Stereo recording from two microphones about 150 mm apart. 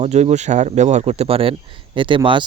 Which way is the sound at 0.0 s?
50° right (ahead or behind).